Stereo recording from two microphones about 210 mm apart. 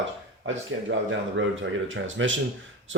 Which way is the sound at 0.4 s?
65° right (ahead or behind).